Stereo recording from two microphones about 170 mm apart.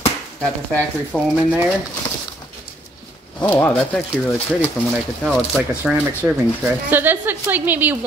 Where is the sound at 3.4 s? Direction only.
10° left (ahead or behind).